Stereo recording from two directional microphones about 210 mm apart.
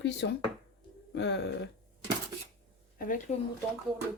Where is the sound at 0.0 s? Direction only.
55° left (ahead or behind).